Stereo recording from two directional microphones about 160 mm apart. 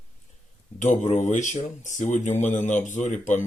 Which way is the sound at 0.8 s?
45° left (ahead or behind).